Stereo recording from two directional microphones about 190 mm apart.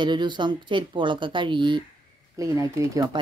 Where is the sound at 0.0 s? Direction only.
25° right (ahead or behind).